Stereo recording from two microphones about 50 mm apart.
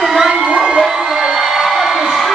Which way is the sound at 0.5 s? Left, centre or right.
Centre.